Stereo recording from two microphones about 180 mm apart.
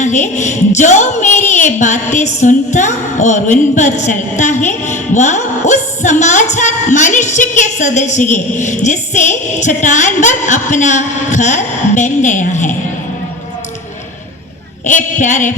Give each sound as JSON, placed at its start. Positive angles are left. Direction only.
{"t": 0.0, "sound": "a woman's voice", "side_deg": 40}
{"t": 1.8, "sound": "music", "side_deg": 40}
{"t": 3.8, "sound": "a woman's voice", "side_deg": 45}
{"t": 14.8, "sound": "a woman's voice", "side_deg": 45}